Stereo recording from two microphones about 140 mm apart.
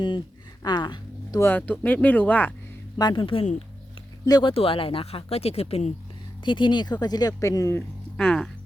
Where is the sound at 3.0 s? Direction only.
35° left (ahead or behind).